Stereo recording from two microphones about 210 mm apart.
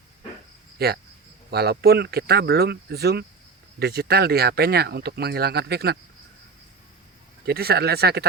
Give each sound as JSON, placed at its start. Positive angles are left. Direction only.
{"t": 0.8, "sound": "speech", "side_deg": -50}
{"t": 7.4, "sound": "speech", "side_deg": -50}